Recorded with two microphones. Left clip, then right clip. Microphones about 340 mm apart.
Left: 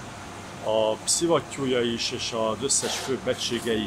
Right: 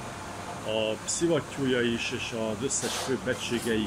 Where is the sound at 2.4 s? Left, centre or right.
Left.